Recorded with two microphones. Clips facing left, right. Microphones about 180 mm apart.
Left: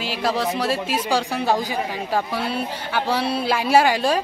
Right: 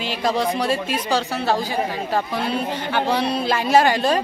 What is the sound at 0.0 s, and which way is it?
A woman's voice, 5° left (ahead or behind).